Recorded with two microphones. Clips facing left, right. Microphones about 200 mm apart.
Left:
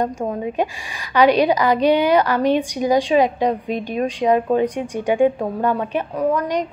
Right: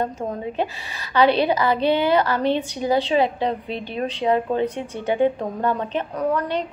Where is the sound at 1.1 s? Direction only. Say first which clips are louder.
Left 3 dB; 15° left (ahead or behind).